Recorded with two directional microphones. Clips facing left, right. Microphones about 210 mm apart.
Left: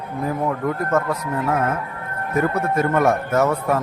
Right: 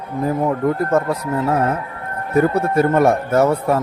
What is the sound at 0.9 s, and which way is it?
A man's voice, 30° right (ahead or behind).